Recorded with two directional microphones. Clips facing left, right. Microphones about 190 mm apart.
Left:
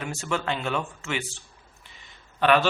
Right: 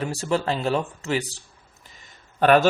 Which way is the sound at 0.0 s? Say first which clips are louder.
Right 5 dB; 35° right (ahead or behind).